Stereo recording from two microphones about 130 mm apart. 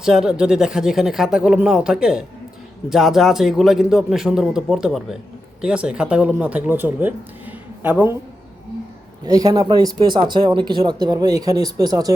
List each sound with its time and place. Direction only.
0.0 s speech: 5° right (ahead or behind)
9.2 s speech: 30° right (ahead or behind)